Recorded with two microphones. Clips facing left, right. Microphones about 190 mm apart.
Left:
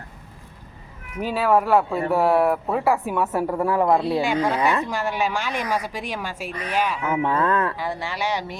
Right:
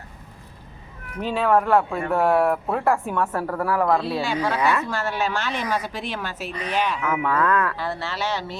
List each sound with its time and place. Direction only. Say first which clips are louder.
1.2 s speech: even; 5° left (ahead or behind)
7.0 s speech: left 1 dB; 25° left (ahead or behind)
7.8 s speech: even; 15° left (ahead or behind)